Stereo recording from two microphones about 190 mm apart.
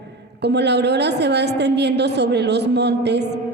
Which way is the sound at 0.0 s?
60° right (ahead or behind).